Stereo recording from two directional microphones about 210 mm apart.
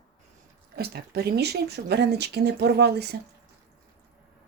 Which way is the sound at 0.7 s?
50° right (ahead or behind).